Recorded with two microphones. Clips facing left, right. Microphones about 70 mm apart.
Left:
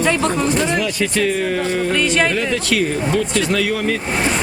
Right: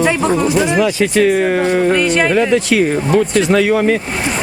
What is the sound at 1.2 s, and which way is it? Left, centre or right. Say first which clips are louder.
Speech: right 7 dB; right.